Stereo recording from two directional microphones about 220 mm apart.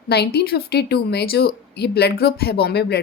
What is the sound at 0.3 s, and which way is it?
Speech, 45° left (ahead or behind).